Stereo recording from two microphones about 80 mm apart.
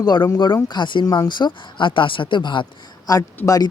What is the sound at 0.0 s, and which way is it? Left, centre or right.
Speech, left.